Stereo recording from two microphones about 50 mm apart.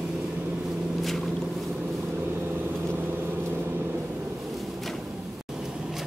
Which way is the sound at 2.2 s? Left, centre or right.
Right.